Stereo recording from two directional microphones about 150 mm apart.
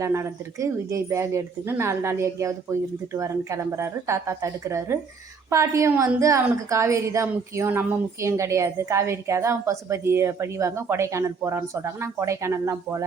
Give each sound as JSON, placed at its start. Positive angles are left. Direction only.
{"t": 0.0, "sound": "a woman's voice", "side_deg": -20}